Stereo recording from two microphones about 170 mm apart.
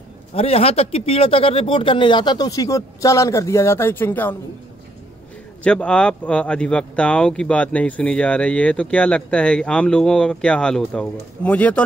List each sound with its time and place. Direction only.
0.3 s speech: 35° left (ahead or behind); by 4.4 s 10° left (ahead or behind)
5.6 s speech: 5° left (ahead or behind)